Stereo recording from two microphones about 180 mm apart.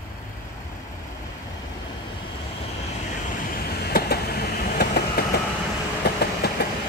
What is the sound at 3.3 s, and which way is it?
Vehicle, 55° left (ahead or behind).